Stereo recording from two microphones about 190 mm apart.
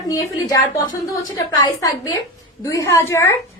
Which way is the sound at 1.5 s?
20° left (ahead or behind).